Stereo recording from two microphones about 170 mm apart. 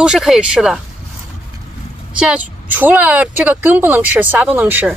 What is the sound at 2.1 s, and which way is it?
A woman's voice, 5° right (ahead or behind).